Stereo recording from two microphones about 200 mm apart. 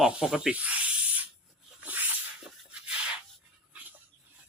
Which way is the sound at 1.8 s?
10° right (ahead or behind).